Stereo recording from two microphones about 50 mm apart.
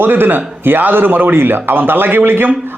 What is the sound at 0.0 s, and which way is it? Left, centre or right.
A man's voice, right.